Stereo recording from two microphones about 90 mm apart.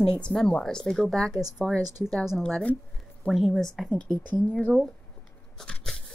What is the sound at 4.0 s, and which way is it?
Speech, 15° left (ahead or behind).